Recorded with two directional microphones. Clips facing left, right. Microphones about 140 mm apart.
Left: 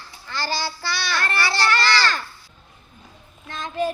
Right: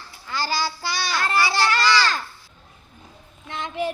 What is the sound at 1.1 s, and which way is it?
Child singing, 15° right (ahead or behind).